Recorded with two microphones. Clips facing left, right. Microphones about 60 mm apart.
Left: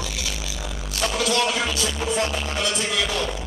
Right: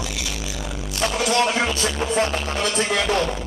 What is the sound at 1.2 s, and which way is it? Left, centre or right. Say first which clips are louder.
Music: right 3 dB; right.